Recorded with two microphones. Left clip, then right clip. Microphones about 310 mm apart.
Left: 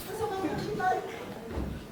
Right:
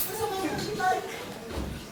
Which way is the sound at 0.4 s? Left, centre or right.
Centre.